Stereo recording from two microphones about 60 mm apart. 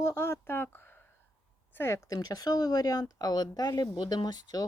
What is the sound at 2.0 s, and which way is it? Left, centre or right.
Speech, left.